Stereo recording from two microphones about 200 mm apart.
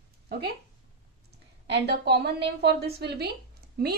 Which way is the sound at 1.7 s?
55° right (ahead or behind).